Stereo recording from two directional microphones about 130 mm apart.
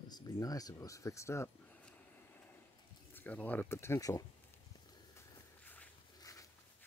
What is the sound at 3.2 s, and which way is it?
Speech, 10° left (ahead or behind).